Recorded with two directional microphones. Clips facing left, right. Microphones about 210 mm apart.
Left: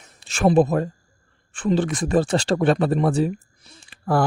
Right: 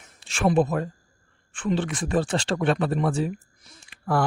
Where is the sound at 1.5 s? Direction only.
40° left (ahead or behind).